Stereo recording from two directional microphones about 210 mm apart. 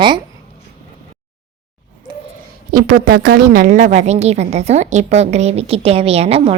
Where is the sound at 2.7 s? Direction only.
40° right (ahead or behind).